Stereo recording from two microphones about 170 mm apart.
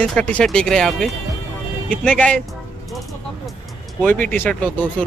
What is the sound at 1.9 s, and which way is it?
Speech, 10° left (ahead or behind).